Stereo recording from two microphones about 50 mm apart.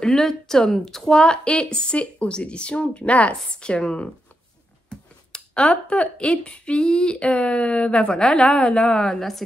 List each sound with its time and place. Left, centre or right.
0.0 s speech: centre